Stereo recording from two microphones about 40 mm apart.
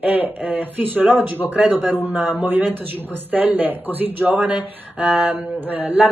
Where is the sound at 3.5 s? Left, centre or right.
Right.